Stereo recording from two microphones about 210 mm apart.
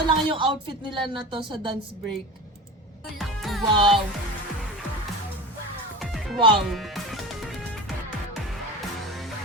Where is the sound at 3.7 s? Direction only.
25° right (ahead or behind).